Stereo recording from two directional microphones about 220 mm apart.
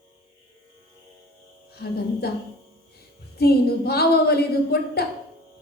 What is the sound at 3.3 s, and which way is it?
A woman's voice, 45° left (ahead or behind).